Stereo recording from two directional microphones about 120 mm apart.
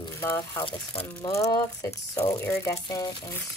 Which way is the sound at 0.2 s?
20° left (ahead or behind).